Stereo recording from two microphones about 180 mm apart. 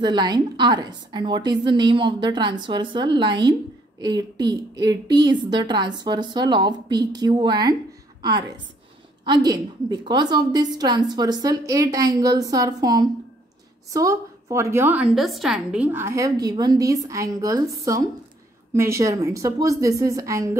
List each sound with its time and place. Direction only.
0.0 s a woman's voice: 25° right (ahead or behind)